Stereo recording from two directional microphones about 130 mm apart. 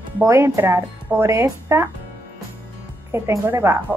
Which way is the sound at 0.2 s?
20° right (ahead or behind).